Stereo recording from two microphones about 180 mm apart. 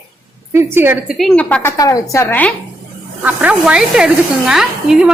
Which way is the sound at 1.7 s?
20° left (ahead or behind).